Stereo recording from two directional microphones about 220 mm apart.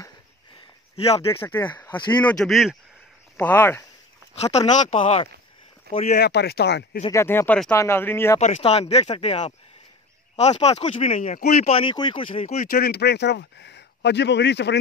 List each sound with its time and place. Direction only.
1.4 s speech: 10° left (ahead or behind)
4.4 s speech: 30° left (ahead or behind)
6.1 s speech: 45° left (ahead or behind)
7.1 s speech: 10° left (ahead or behind)
8.4 s speech: 30° left (ahead or behind)
12.7 s speech: 45° left (ahead or behind)